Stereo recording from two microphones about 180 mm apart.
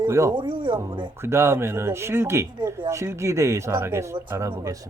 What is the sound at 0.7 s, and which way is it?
A woman's voice, 15° right (ahead or behind).